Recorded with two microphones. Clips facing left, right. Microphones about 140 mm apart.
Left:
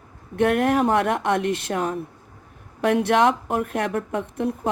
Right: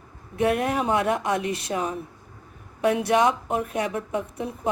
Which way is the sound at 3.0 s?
65° left (ahead or behind).